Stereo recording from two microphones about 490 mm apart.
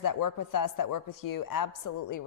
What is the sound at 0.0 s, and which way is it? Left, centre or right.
A woman's voice, left.